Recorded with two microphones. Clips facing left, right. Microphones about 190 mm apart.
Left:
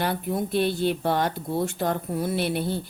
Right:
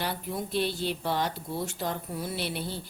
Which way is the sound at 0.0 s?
55° left (ahead or behind).